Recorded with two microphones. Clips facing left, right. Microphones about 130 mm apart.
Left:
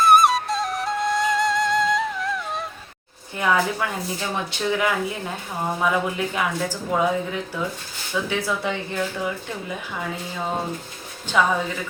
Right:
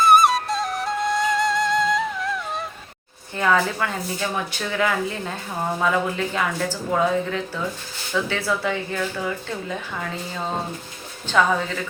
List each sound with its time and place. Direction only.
0.0 s flute: centre (ahead or behind)
3.3 s speech: 10° left (ahead or behind)